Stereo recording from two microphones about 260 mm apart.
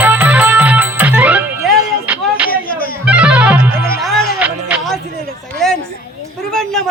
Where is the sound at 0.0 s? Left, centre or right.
Centre.